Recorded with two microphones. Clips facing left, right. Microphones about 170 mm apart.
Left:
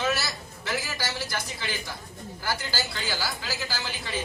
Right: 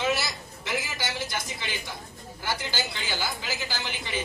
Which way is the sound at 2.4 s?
20° right (ahead or behind).